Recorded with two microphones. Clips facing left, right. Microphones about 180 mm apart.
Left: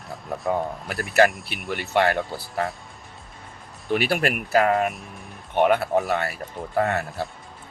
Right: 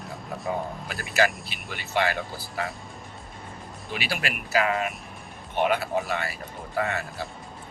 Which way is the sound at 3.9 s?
55° left (ahead or behind).